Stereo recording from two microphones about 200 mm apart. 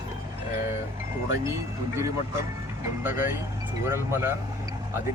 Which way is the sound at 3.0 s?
10° right (ahead or behind).